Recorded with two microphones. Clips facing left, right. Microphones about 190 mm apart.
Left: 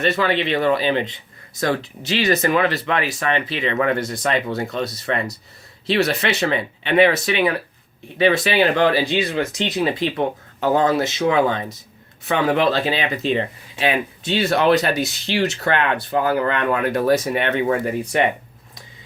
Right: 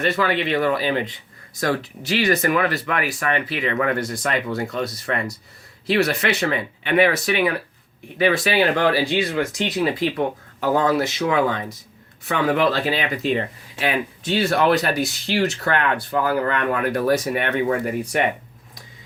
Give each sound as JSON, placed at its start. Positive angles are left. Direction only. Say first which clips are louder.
{"t": 0.0, "sound": "speech", "louder": "left 1 dB", "side_deg": 25}